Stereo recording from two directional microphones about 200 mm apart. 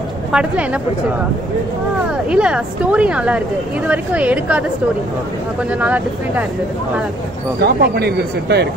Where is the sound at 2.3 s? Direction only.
5° right (ahead or behind).